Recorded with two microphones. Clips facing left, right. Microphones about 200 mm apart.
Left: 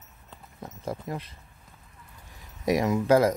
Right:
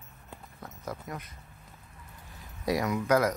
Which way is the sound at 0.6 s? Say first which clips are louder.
Left 5 dB; 30° left (ahead or behind).